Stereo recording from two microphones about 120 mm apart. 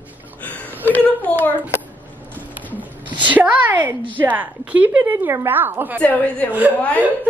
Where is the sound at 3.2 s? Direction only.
10° right (ahead or behind).